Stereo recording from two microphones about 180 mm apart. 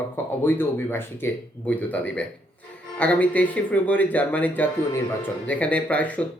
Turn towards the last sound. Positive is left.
turn(degrees=10)  # may be behind; listen again after turning